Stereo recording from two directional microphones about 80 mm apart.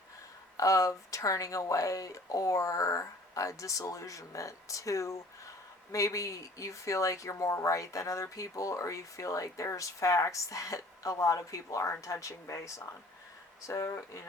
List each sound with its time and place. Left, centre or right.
0.5 s speech: left